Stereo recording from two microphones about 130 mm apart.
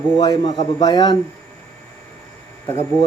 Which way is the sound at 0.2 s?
35° left (ahead or behind).